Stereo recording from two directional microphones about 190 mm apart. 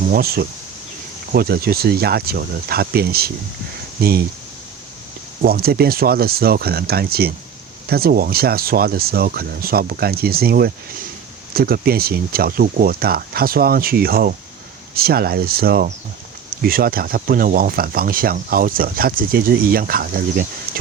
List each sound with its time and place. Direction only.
0.1 s speech: 55° right (ahead or behind)
5.4 s speech: 55° right (ahead or behind)